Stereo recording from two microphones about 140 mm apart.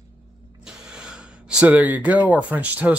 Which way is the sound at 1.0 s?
5° right (ahead or behind).